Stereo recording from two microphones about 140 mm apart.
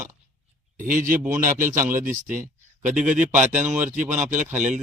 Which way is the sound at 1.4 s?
75° right (ahead or behind).